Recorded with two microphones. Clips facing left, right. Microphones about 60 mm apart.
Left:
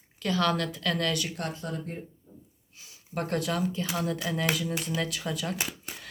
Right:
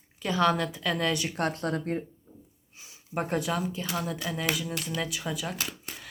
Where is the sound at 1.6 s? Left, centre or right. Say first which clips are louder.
Right 6 dB; right.